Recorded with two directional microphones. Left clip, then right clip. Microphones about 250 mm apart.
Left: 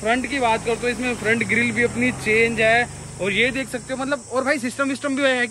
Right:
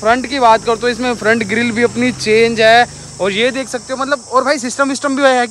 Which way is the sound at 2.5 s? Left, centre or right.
Centre.